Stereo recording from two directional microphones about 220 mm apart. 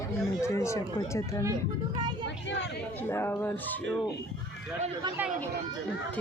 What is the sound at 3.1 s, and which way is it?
Speech, 10° left (ahead or behind).